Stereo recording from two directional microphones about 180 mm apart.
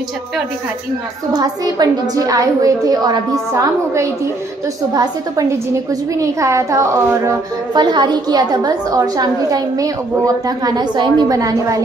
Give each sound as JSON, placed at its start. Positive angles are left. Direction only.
{"t": 1.3, "sound": "a child's voice", "side_deg": -20}